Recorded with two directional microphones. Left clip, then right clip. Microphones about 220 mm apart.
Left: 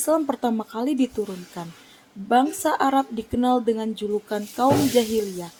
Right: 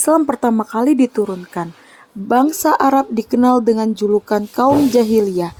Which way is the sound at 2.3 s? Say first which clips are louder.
Right 6 dB; 35° right (ahead or behind).